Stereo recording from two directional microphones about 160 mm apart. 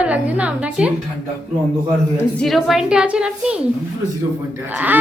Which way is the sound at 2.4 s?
Centre (ahead or behind).